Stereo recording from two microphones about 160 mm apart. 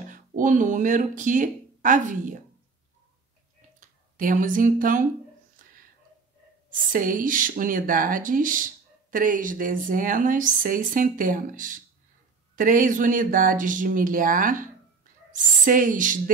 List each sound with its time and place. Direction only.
0.1 s speech: 55° right (ahead or behind)
3.8 s speech: 55° right (ahead or behind)
6.7 s speech: 55° right (ahead or behind)